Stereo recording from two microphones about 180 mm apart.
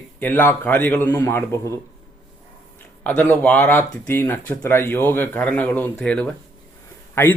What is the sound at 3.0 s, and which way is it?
Speech, 10° left (ahead or behind).